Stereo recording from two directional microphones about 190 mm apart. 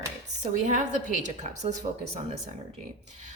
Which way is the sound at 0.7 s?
40° right (ahead or behind).